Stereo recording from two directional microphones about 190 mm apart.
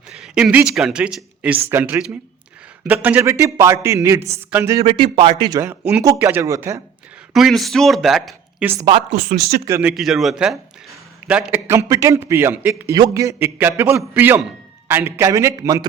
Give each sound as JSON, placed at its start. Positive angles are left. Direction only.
{"t": 0.2, "sound": "a man's voice", "side_deg": -5}
{"t": 4.9, "sound": "a man's voice", "side_deg": -30}
{"t": 5.5, "sound": "a man's voice", "side_deg": -15}
{"t": 7.3, "sound": "a man's voice", "side_deg": 0}
{"t": 9.9, "sound": "a man's voice", "side_deg": 0}